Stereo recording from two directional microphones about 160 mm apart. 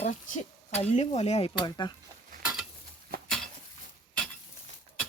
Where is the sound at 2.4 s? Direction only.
5° right (ahead or behind).